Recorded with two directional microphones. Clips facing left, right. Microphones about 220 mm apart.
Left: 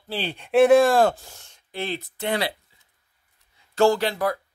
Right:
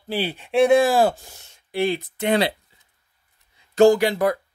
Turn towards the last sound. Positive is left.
turn(degrees=-20)  # may be behind; listen again after turning